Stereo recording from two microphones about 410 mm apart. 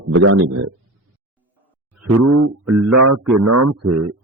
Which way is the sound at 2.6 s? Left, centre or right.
Right.